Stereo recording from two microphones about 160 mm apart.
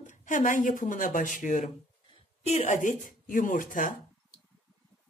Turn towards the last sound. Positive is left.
turn(degrees=55)  # may be behind; listen again after turning